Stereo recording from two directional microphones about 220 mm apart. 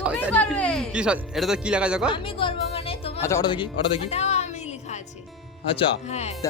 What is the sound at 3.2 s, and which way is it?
Speech, 15° left (ahead or behind).